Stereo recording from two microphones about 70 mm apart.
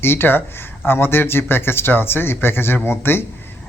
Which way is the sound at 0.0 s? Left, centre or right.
Left.